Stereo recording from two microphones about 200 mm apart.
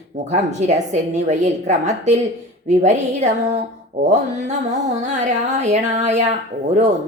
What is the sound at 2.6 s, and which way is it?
Music, 35° right (ahead or behind).